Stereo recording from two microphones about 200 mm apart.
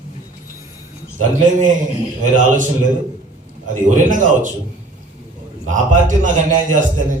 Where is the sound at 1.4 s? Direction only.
40° right (ahead or behind).